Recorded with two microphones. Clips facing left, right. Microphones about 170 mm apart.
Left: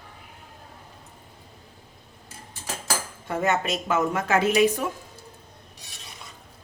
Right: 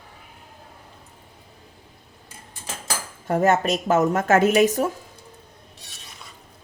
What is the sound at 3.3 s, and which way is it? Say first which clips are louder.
Speech: right 5 dB; 40° right (ahead or behind).